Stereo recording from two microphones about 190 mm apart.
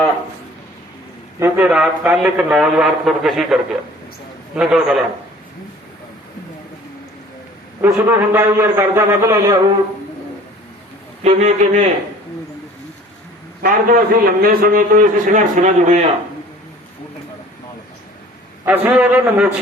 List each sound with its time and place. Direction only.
1.4 s speech: 5° right (ahead or behind)
7.8 s a man's voice: 10° right (ahead or behind)
11.2 s a man's voice: 35° right (ahead or behind)
13.6 s a man's voice: 50° right (ahead or behind)
18.6 s speech: 10° right (ahead or behind)